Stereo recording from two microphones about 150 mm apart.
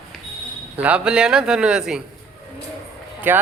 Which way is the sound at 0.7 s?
10° right (ahead or behind).